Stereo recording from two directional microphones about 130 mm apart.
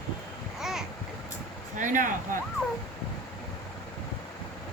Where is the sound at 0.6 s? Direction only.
5° right (ahead or behind).